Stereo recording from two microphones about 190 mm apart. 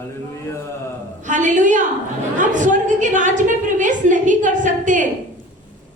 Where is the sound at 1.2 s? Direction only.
40° right (ahead or behind).